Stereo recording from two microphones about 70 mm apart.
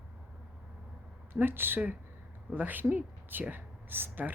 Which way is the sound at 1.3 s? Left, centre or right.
Right.